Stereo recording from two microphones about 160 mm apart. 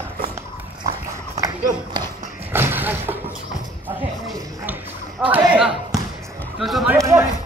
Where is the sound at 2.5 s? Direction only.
15° right (ahead or behind).